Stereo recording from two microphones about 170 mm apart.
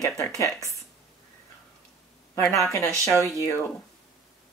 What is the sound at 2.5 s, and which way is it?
Speech, 15° left (ahead or behind).